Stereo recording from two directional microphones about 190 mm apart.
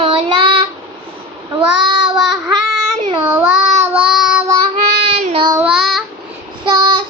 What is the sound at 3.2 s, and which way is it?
Child singing, 5° right (ahead or behind).